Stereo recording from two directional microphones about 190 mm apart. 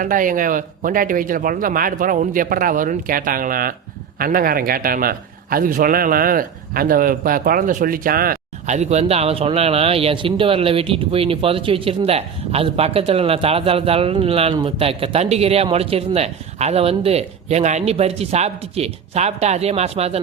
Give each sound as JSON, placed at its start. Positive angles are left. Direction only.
{"t": 0.0, "sound": "a man's voice", "side_deg": -45}